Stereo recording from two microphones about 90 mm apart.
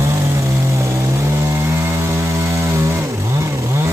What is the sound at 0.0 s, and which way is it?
Chainsaw, 35° right (ahead or behind).